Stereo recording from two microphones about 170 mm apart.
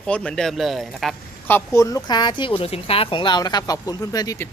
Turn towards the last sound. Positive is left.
turn(degrees=20)  # may be behind; listen again after turning